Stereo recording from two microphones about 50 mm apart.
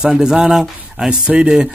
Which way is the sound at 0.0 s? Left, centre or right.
Centre.